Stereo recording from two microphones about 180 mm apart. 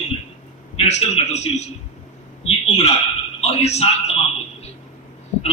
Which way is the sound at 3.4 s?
35° left (ahead or behind).